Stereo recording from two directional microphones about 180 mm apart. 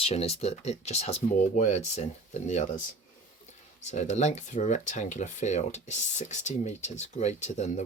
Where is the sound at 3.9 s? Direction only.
40° left (ahead or behind).